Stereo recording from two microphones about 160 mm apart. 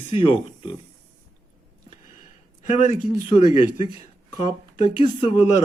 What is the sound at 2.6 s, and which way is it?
Speech, 45° left (ahead or behind).